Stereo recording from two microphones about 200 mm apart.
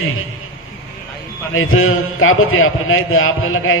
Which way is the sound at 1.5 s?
90° left.